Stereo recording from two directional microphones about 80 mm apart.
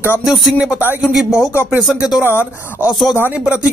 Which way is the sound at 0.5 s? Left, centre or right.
Centre.